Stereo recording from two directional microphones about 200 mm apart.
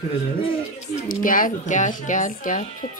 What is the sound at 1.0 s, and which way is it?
Speech, 45° left (ahead or behind).